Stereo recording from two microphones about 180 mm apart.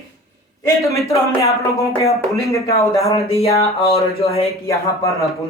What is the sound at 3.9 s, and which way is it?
Speech, 35° left (ahead or behind).